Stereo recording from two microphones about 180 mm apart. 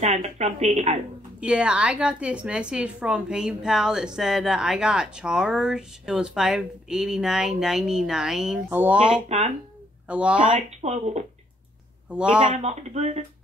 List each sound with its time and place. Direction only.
0.0 s speech: 35° right (ahead or behind)
1.4 s a woman's voice: 5° right (ahead or behind)
10.4 s speech: 40° right (ahead or behind)
12.1 s a woman's voice: 5° right (ahead or behind)
12.5 s speech: 35° right (ahead or behind)